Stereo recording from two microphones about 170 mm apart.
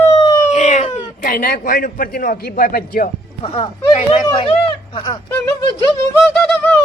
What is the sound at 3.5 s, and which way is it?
Speech, 35° left (ahead or behind).